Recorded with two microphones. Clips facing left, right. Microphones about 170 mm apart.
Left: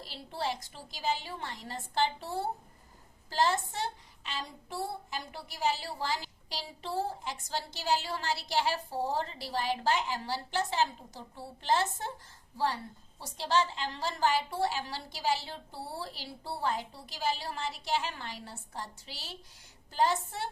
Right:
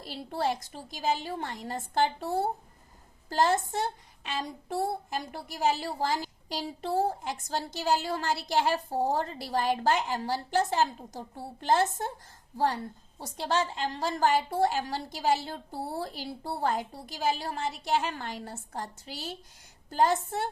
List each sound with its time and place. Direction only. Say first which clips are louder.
0.0 s a woman's voice: right 5 dB; 50° right (ahead or behind)